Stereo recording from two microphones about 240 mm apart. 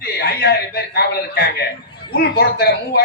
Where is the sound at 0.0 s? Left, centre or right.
Left.